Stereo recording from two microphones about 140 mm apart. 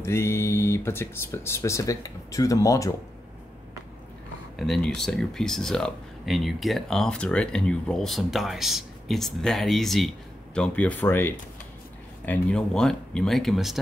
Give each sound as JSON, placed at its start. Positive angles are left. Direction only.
{"t": 0.0, "sound": "speech", "side_deg": 20}
{"t": 4.6, "sound": "speech", "side_deg": 0}